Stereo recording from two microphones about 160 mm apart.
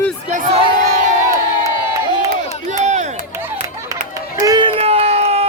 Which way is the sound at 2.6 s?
50° right (ahead or behind).